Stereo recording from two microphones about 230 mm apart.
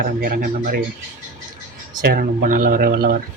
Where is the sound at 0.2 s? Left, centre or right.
Right.